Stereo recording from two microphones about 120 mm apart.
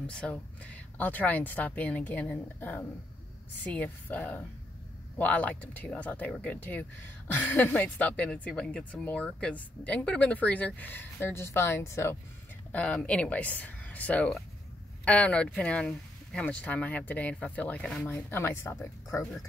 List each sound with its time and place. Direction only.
0.0 s speech: 10° left (ahead or behind)
12.7 s speech: 10° left (ahead or behind)
18.0 s speech: 20° left (ahead or behind)